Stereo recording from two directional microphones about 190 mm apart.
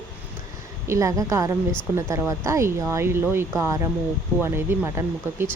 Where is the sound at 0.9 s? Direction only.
15° right (ahead or behind).